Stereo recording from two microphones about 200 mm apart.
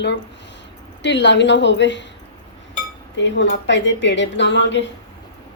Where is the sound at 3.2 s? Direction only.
60° left (ahead or behind).